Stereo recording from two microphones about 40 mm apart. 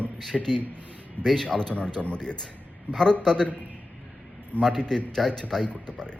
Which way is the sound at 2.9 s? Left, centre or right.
Left.